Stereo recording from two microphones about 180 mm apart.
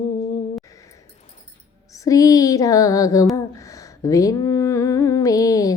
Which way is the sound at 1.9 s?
20° left (ahead or behind).